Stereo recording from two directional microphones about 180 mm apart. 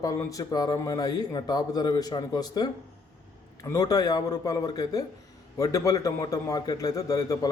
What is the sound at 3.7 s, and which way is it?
A man's voice, 20° left (ahead or behind).